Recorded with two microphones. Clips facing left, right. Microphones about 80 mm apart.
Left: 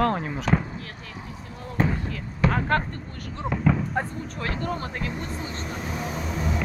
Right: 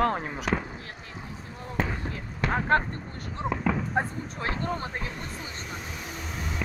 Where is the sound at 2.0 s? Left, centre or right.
Right.